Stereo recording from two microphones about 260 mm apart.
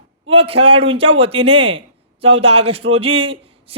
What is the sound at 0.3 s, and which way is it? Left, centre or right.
A man's voice, right.